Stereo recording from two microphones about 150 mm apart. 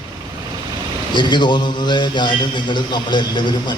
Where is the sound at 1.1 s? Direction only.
30° left (ahead or behind).